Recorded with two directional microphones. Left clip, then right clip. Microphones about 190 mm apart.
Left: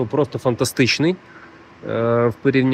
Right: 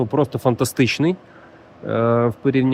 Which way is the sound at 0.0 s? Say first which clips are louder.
Right 1 dB; 30° right (ahead or behind).